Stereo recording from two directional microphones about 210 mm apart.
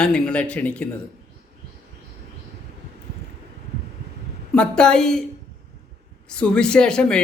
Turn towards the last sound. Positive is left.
turn(degrees=5)  # may be behind; listen again after turning